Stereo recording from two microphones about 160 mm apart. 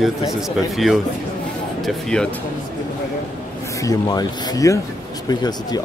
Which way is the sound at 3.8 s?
25° left (ahead or behind).